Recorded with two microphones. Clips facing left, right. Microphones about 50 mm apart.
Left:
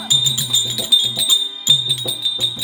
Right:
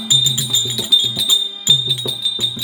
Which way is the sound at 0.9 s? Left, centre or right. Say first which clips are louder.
Right 1 dB; centre.